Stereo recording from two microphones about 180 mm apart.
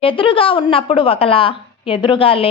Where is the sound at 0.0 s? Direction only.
30° left (ahead or behind).